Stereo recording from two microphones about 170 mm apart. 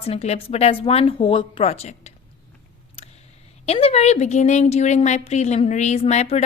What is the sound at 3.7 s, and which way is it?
A woman's voice, 35° left (ahead or behind).